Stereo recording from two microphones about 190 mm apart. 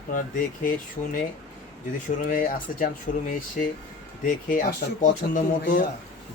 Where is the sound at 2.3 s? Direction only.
45° left (ahead or behind).